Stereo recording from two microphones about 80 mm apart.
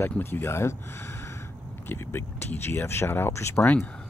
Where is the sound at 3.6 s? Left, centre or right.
Left.